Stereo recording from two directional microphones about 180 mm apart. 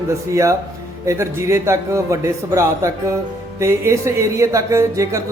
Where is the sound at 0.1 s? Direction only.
15° right (ahead or behind).